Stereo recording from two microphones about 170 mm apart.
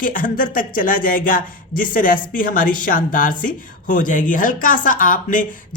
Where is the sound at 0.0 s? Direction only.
50° left (ahead or behind).